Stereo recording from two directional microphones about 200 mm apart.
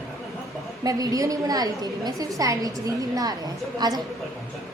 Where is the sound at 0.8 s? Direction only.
20° right (ahead or behind).